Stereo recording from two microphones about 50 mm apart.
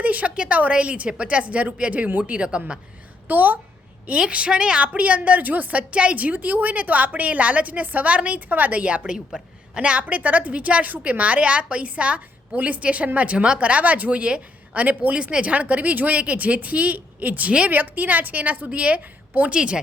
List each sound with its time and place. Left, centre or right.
0.0 s speech: right
3.2 s a woman's voice: right
4.2 s a woman's voice: right
19.5 s speech: centre